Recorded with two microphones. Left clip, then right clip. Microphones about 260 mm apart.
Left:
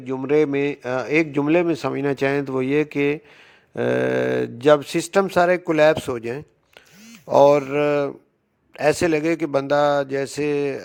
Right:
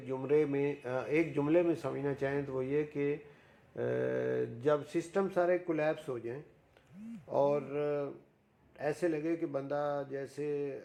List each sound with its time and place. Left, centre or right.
0.0 s a man's voice: left